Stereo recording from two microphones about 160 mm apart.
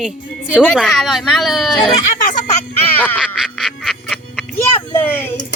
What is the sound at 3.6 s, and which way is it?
Music, centre (ahead or behind).